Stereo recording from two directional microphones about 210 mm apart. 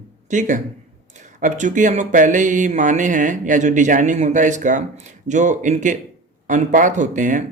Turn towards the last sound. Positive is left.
turn(degrees=-35)  # may be behind; listen again after turning